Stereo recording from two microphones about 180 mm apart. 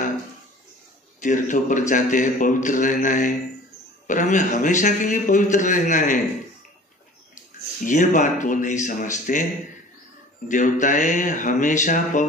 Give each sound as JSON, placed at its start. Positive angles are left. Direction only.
{"t": 1.2, "sound": "a man's voice", "side_deg": 45}
{"t": 7.8, "sound": "a man's voice", "side_deg": 45}
{"t": 10.5, "sound": "a man's voice", "side_deg": 45}